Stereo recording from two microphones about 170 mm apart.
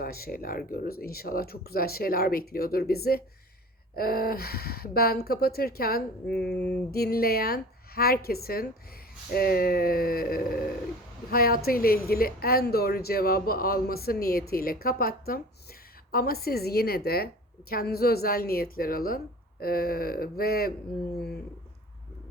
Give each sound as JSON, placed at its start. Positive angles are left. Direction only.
{"t": 0.0, "sound": "speech", "side_deg": 60}